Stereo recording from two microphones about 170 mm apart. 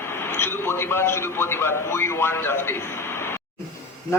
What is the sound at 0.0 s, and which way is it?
A man's voice, 15° left (ahead or behind).